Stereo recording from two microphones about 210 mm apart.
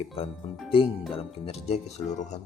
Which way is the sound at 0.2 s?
30° left (ahead or behind).